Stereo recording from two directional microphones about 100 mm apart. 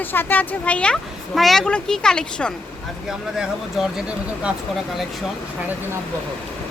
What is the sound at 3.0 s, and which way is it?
Speech, 5° right (ahead or behind).